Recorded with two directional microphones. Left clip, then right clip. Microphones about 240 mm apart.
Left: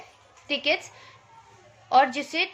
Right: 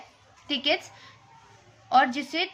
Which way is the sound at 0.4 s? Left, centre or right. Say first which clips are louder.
Left 1 dB; centre.